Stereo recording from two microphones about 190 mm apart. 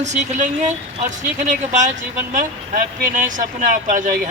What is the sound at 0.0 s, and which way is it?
Speech, 40° right (ahead or behind).